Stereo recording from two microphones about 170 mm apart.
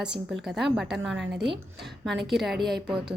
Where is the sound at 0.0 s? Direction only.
5° right (ahead or behind).